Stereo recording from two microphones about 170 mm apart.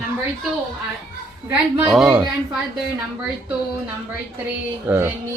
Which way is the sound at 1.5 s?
5° right (ahead or behind).